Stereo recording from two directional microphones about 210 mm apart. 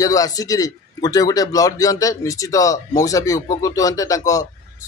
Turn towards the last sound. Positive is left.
turn(degrees=15)  # may be behind; listen again after turning